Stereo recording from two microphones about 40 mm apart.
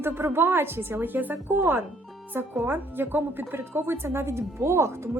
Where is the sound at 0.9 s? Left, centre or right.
Right.